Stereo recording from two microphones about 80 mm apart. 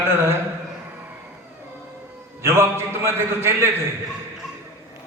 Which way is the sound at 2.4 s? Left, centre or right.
Right.